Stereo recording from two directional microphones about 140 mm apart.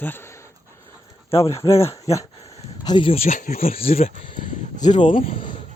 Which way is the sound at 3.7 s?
45° left (ahead or behind).